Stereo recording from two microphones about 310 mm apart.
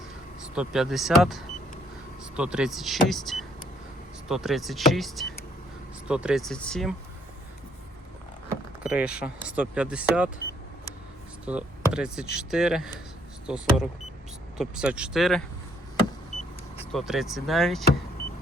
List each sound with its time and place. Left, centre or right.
0.5 s speech: centre
8.4 s speech: centre
11.4 s speech: centre
16.3 s vehicle: left
16.9 s speech: centre